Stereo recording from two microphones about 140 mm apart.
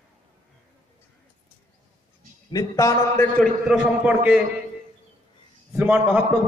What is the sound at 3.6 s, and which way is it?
Speech, 5° right (ahead or behind).